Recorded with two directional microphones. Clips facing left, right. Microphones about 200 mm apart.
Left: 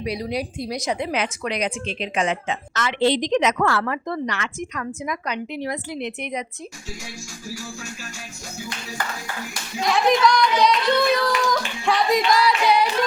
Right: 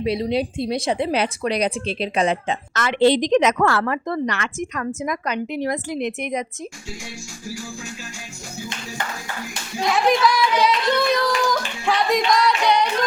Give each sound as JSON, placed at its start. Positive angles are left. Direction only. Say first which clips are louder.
{"t": 0.0, "sound": "a woman's voice", "louder": "right 5 dB", "side_deg": -25}
{"t": 2.7, "sound": "a woman's voice", "louder": "right 4 dB", "side_deg": -50}
{"t": 9.9, "sound": "speech", "louder": "even", "side_deg": -5}
{"t": 11.5, "sound": "singing", "louder": "even", "side_deg": 0}